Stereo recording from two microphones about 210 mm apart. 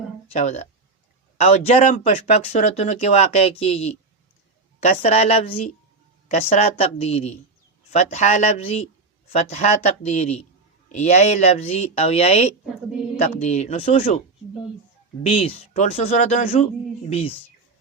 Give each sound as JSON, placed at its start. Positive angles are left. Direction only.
{"t": 0.3, "sound": "speech", "side_deg": 30}
{"t": 15.3, "sound": "speech", "side_deg": 35}